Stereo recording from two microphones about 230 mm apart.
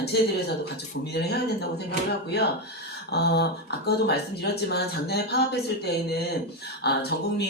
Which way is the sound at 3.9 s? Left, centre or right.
Left.